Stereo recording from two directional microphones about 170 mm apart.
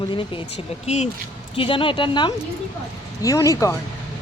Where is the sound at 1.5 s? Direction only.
30° left (ahead or behind).